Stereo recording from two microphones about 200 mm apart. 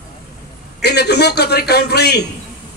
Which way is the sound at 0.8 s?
55° left (ahead or behind).